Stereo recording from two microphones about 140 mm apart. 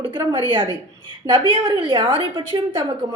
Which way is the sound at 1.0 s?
35° right (ahead or behind).